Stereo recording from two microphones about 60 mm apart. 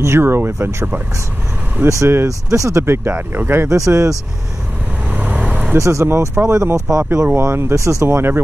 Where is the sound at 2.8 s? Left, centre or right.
Right.